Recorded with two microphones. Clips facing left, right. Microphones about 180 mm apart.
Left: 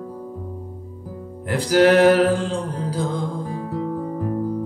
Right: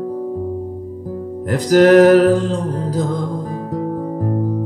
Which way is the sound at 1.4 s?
40° right (ahead or behind).